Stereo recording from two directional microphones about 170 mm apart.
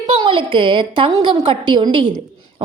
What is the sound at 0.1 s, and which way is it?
A woman's voice, 30° right (ahead or behind).